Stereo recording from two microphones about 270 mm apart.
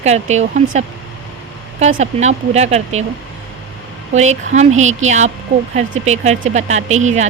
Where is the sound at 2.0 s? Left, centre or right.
Right.